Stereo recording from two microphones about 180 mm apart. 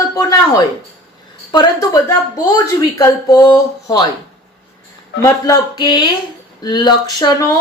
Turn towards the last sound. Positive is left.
turn(degrees=20)  # may be behind; listen again after turning